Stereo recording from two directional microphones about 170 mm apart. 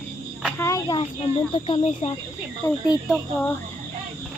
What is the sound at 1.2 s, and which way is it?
Speech, 30° left (ahead or behind).